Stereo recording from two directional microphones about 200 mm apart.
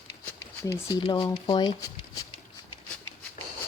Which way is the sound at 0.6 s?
15° left (ahead or behind).